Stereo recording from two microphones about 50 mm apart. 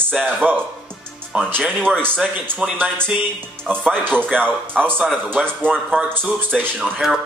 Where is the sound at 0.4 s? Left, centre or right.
Right.